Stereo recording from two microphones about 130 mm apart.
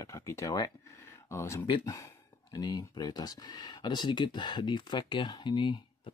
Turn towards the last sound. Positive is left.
turn(degrees=40)  # may be behind; listen again after turning